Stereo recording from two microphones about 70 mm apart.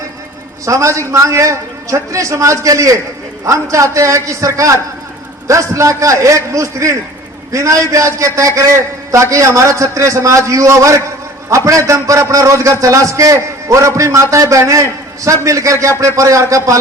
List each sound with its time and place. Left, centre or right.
0.6 s a man's voice: right